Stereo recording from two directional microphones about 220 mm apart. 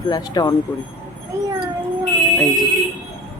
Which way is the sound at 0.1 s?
20° left (ahead or behind).